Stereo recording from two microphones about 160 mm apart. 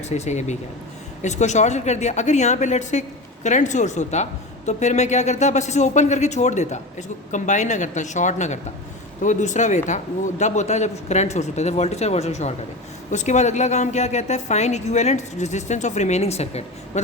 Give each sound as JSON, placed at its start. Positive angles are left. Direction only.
{"t": 0.0, "sound": "a woman's voice", "side_deg": 45}